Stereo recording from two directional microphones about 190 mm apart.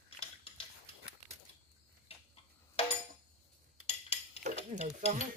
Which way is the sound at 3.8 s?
35° left (ahead or behind).